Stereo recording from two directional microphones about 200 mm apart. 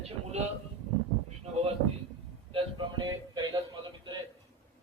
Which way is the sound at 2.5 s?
25° right (ahead or behind).